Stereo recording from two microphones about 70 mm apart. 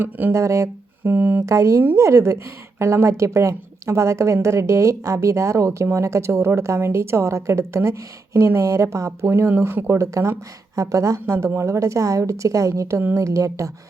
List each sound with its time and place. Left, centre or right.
0.0 s speech: right
0.3 s a woman's voice: right
1.0 s a woman's voice: right
1.5 s a woman's voice: right
9.5 s a woman's voice: right